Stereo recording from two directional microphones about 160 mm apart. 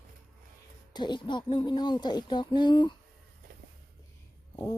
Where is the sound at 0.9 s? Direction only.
30° left (ahead or behind).